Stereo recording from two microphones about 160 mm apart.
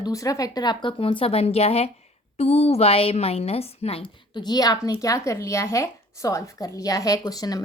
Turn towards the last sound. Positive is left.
turn(degrees=25)  # may be behind; listen again after turning